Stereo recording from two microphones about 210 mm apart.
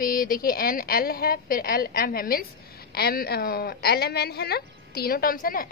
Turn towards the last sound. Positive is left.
turn(degrees=45)  # may be behind; listen again after turning